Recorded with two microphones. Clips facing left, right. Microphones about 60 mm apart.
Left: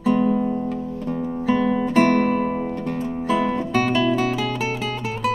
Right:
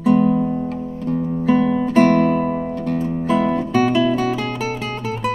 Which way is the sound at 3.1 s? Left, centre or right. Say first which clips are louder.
Right 2 dB; centre.